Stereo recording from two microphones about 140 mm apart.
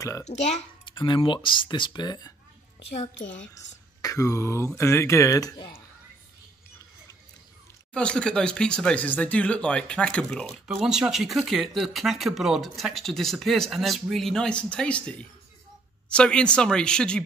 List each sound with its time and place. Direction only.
0.3 s a child's voice: 55° left (ahead or behind)
0.8 s speech: 35° left (ahead or behind)
2.8 s a child's voice: 45° left (ahead or behind)
3.5 s speech: 25° left (ahead or behind)
7.9 s speech: 5° left (ahead or behind)